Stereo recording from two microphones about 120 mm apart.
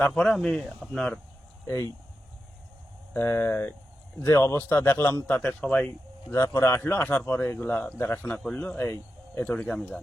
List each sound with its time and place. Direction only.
0.1 s speech: centre (ahead or behind)
1.6 s speech: 20° left (ahead or behind)
3.1 s speech: 20° left (ahead or behind)
6.3 s speech: 20° left (ahead or behind)